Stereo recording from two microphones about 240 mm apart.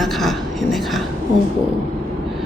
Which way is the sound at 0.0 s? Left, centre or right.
Centre.